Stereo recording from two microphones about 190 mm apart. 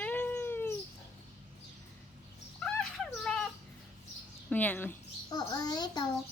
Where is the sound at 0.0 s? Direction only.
10° left (ahead or behind).